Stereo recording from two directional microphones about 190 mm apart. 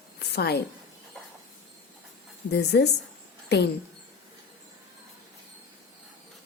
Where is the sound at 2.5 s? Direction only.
60° left (ahead or behind).